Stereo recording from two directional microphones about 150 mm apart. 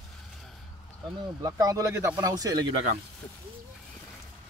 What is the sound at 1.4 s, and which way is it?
Speech, 20° right (ahead or behind).